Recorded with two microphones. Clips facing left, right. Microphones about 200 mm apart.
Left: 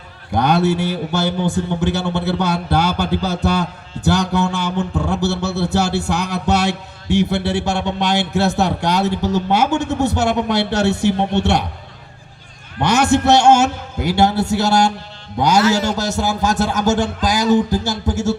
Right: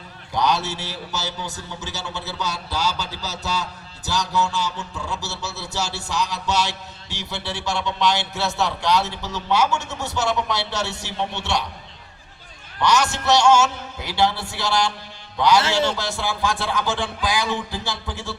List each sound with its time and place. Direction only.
0.3 s a man's voice: 55° left (ahead or behind)
12.8 s speech: 55° left (ahead or behind)